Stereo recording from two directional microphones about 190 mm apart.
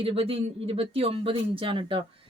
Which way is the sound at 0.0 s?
30° right (ahead or behind).